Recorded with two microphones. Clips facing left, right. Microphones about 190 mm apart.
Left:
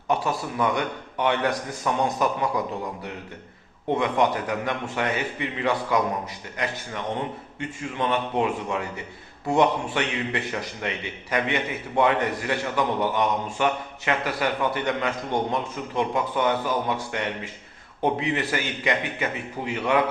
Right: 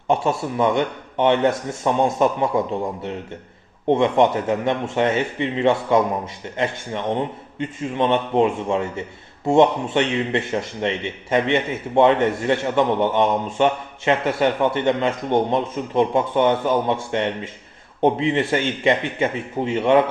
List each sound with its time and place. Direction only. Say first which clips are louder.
0.5 s a man's voice: right 5 dB; 25° right (ahead or behind)